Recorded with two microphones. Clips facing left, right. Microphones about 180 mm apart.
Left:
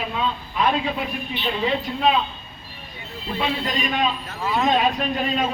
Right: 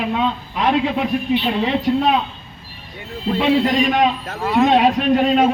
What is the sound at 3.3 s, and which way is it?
A man's voice, 70° right (ahead or behind).